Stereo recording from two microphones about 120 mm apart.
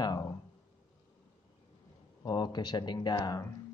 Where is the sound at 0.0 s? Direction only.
30° left (ahead or behind).